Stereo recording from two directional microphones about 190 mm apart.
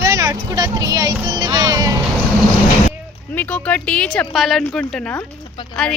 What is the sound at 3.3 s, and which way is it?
Speech, 10° left (ahead or behind).